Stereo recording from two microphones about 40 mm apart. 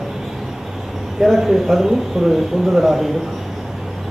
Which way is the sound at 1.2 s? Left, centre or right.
Centre.